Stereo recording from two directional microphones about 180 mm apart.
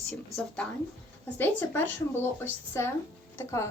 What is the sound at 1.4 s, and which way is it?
Speech, 10° left (ahead or behind).